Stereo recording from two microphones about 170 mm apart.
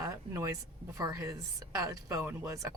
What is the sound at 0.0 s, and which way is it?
A woman's voice, 15° right (ahead or behind).